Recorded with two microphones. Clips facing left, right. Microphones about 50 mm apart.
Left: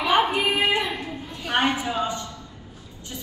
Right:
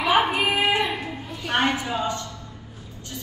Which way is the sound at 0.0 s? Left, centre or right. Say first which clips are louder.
Even; centre.